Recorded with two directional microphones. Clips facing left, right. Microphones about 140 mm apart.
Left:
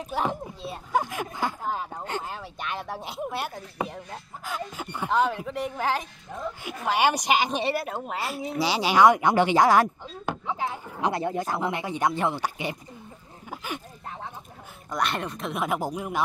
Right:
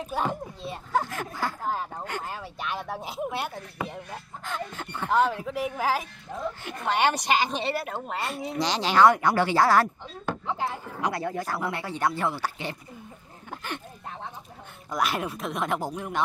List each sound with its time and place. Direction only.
0.0 s speech: centre (ahead or behind)
0.9 s speech: 15° left (ahead or behind)
1.7 s speech: centre (ahead or behind)
5.1 s speech: centre (ahead or behind)
8.1 s speech: centre (ahead or behind)
10.4 s speech: centre (ahead or behind)
11.0 s speech: 25° left (ahead or behind)
14.9 s speech: 5° right (ahead or behind)